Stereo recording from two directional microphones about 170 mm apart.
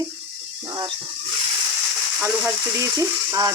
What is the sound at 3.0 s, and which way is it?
Sizzle, 20° right (ahead or behind).